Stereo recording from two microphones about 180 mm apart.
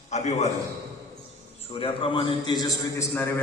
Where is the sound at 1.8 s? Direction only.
30° left (ahead or behind).